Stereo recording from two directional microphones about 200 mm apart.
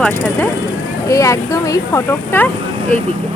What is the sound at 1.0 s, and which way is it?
Speech, 15° left (ahead or behind).